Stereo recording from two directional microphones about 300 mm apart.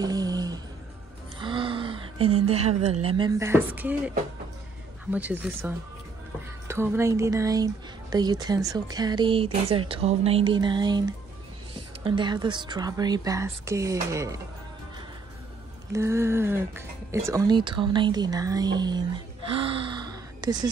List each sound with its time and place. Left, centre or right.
0.0 s a sound: centre
1.4 s music: centre
2.8 s speech: centre
5.1 s speech: centre
15.9 s speech: centre
19.5 s a sound: centre